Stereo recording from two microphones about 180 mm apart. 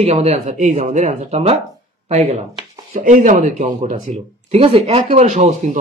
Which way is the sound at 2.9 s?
50° right (ahead or behind).